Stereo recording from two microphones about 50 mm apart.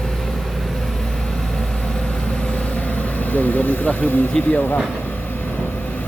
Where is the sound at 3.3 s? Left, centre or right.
Left.